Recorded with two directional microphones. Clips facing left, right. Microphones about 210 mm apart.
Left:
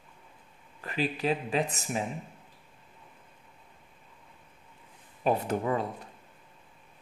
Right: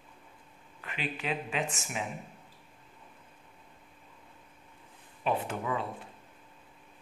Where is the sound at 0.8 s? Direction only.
35° left (ahead or behind).